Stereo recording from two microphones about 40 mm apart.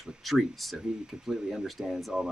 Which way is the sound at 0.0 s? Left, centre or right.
Centre.